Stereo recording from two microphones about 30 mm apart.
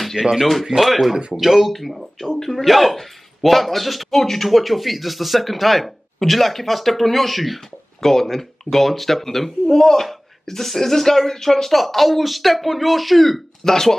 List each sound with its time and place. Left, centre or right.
0.2 s speech: centre
0.7 s speech: right
1.3 s speech: centre
1.7 s speech: centre
11.7 s speech: centre
13.7 s speech: centre